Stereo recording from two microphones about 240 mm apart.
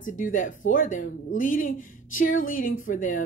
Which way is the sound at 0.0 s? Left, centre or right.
Left.